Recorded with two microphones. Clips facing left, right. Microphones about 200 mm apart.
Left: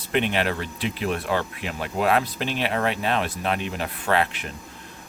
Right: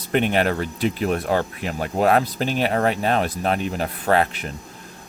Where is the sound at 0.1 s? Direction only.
45° right (ahead or behind).